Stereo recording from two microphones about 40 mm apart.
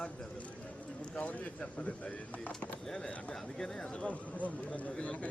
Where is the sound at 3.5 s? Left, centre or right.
Centre.